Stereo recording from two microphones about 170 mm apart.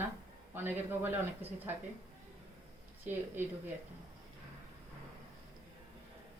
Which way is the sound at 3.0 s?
15° right (ahead or behind).